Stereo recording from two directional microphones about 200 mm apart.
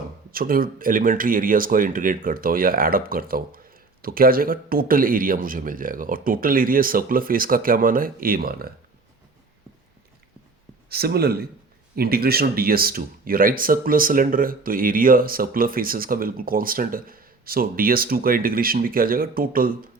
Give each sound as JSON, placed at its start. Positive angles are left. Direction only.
{"t": 0.3, "sound": "speech", "side_deg": -45}
{"t": 10.8, "sound": "speech", "side_deg": -50}